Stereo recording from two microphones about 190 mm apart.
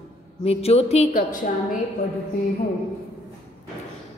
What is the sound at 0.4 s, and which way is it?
A man's voice, 30° left (ahead or behind).